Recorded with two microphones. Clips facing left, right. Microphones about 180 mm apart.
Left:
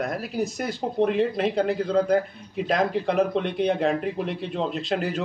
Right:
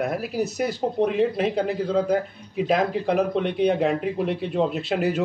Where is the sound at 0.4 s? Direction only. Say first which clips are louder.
Right 3 dB; 5° right (ahead or behind).